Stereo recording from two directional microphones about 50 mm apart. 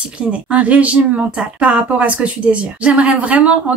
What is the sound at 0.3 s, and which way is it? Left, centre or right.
Speech, right.